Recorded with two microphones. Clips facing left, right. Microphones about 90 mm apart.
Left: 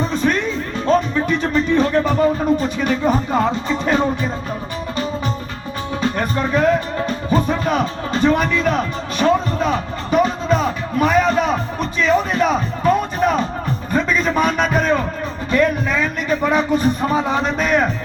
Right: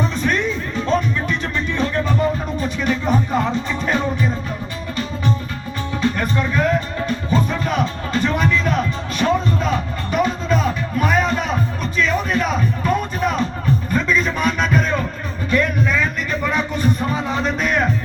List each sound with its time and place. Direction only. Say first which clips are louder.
0.1 s music: left 2 dB; 40° left (ahead or behind)
6.1 s music: left 2 dB; 40° left (ahead or behind)
13.9 s a sound: left 5 dB; 45° left (ahead or behind)